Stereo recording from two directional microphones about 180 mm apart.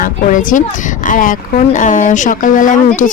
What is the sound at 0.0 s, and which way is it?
Speech, 45° left (ahead or behind).